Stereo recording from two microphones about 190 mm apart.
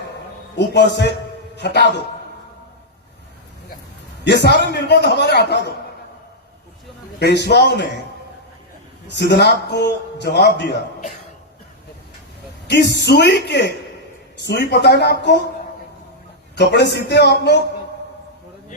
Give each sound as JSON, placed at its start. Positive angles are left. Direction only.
{"t": 0.5, "sound": "a man's voice", "side_deg": 65}
{"t": 4.2, "sound": "a man's voice", "side_deg": 60}
{"t": 7.2, "sound": "a man's voice", "side_deg": 60}
{"t": 9.0, "sound": "a man's voice", "side_deg": 65}
{"t": 12.6, "sound": "a man's voice", "side_deg": 65}
{"t": 16.6, "sound": "a man's voice", "side_deg": 60}